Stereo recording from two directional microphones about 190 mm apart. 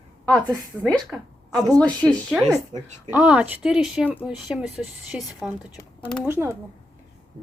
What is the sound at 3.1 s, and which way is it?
A woman's voice, 5° right (ahead or behind).